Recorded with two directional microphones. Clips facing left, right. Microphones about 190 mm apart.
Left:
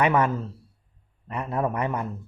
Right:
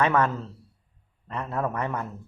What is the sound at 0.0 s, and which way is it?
A man's voice, 10° left (ahead or behind).